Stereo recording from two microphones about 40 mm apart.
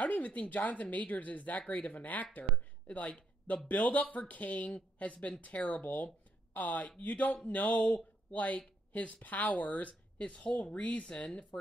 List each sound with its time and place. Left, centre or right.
0.0 s speech: left